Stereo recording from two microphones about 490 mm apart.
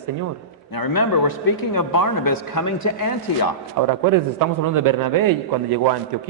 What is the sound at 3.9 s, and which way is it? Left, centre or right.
A man's voice, right.